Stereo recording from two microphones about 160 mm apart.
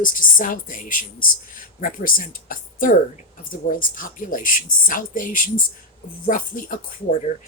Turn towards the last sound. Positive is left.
turn(degrees=55)  # may be behind; listen again after turning